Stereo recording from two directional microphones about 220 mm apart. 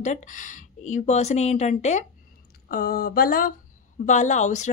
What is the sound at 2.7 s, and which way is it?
Speech, 40° left (ahead or behind).